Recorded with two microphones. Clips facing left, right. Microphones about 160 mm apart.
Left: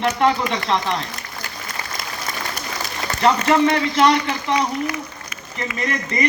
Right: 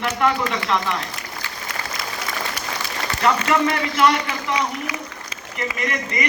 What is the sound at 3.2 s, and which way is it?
A man's voice, 30° left (ahead or behind).